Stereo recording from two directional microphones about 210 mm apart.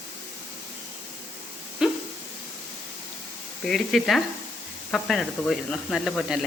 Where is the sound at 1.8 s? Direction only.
5° right (ahead or behind).